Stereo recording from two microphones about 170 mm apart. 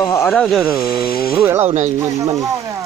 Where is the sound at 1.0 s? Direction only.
60° left (ahead or behind).